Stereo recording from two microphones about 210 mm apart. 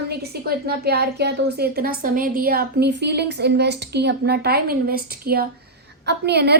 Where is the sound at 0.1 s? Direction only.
50° right (ahead or behind).